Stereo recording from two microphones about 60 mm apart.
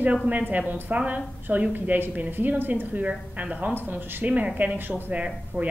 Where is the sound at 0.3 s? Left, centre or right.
Right.